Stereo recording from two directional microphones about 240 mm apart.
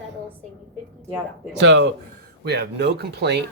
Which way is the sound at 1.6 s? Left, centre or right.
Right.